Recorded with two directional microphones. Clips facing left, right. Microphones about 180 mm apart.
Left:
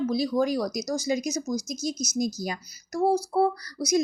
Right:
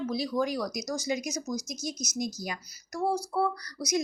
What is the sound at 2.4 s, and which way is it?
A woman's voice, 30° left (ahead or behind).